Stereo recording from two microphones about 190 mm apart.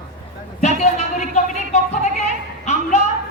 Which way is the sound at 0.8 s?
35° left (ahead or behind).